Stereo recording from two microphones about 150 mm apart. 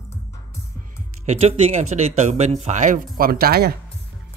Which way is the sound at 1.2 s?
50° right (ahead or behind).